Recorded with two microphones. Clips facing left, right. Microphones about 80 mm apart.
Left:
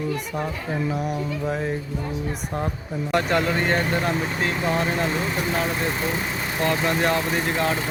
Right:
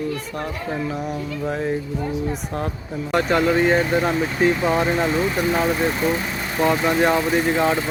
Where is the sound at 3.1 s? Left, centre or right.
Centre.